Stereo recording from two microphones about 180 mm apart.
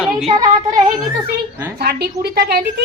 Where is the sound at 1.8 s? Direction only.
60° right (ahead or behind).